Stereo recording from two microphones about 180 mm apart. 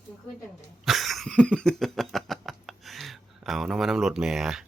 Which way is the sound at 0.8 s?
Centre (ahead or behind).